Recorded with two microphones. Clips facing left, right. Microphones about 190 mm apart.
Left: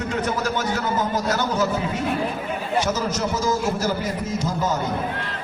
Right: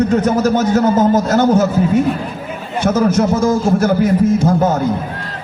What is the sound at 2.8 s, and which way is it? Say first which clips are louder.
A man's voice: right 10 dB; 55° right (ahead or behind).